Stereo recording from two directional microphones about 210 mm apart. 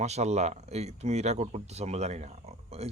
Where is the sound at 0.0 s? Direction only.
30° right (ahead or behind).